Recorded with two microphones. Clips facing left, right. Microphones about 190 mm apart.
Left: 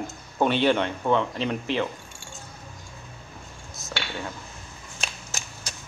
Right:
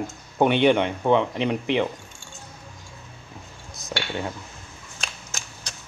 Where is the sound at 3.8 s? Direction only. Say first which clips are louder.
Right 4 dB; 15° right (ahead or behind).